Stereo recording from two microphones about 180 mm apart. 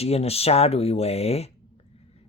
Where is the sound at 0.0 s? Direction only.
35° left (ahead or behind).